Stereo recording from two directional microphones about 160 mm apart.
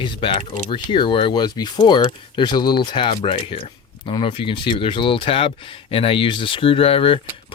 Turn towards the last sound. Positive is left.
turn(degrees=35)  # may be behind; listen again after turning